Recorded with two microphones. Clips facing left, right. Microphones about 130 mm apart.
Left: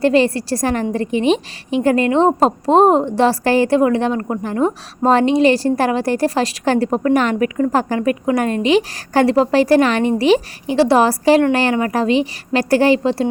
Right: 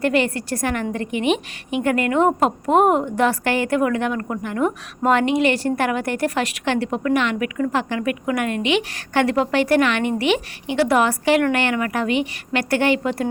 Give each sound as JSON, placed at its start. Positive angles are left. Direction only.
{"t": 0.0, "sound": "a woman's voice", "side_deg": 30}